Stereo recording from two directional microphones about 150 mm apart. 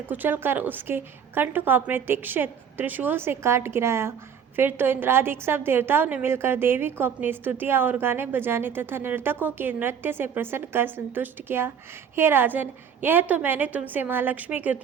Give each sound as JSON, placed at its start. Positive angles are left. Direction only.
{"t": 0.1, "sound": "a woman's voice", "side_deg": -15}